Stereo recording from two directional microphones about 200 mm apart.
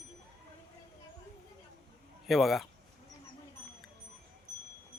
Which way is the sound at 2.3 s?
Centre (ahead or behind).